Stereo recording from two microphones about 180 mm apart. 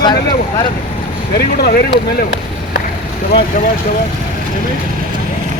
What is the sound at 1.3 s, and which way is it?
Speech, 60° left (ahead or behind).